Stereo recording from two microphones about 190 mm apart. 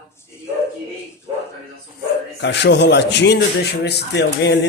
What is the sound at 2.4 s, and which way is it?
A man's voice, 65° left (ahead or behind).